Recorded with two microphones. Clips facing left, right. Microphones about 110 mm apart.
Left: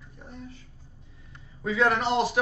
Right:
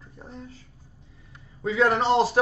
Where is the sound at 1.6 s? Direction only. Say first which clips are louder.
Right 3 dB; 30° right (ahead or behind).